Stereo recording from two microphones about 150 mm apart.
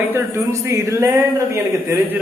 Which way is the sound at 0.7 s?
20° right (ahead or behind).